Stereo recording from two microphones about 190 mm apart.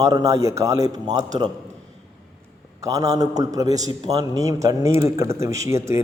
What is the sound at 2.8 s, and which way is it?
A man's voice, 15° right (ahead or behind).